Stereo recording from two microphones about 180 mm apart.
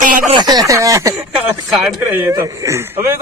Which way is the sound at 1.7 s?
5° right (ahead or behind).